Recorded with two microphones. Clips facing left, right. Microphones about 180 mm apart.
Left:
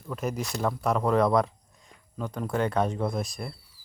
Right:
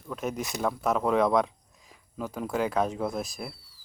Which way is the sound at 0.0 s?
Centre (ahead or behind).